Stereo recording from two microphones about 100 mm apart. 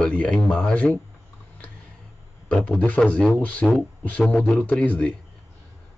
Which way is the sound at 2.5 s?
15° left (ahead or behind).